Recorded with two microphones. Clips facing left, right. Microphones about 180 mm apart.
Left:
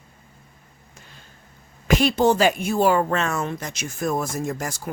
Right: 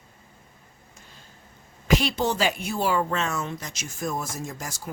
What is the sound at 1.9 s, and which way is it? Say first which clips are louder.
Speech: left 5 dB; 50° left (ahead or behind).